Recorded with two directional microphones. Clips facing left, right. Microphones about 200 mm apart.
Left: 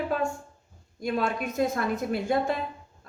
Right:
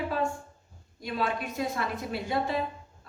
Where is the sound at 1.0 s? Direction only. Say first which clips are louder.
Left 3 dB; 50° left (ahead or behind).